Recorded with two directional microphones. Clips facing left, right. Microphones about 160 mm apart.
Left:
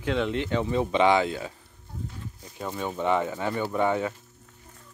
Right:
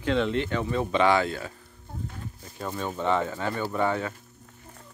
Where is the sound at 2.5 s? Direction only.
15° left (ahead or behind).